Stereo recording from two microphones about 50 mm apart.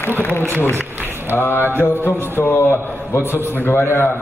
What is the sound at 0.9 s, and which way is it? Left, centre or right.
Speech, right.